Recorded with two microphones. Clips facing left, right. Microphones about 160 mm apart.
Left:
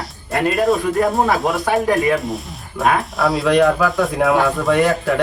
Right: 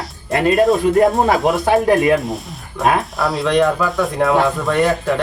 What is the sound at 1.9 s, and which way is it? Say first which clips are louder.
Speech: right 2 dB; 20° right (ahead or behind).